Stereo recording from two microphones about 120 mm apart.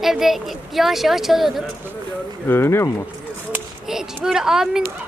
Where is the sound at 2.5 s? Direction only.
20° left (ahead or behind).